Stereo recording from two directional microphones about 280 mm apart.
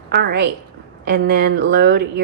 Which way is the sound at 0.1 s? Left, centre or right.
Right.